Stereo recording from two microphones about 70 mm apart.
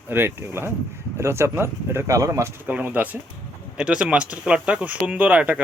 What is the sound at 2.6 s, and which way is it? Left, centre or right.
Speech, right.